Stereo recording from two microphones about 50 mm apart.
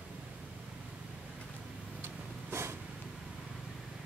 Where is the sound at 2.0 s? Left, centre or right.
Right.